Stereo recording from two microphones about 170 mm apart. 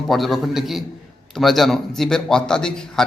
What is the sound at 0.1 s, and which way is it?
Speech, centre (ahead or behind).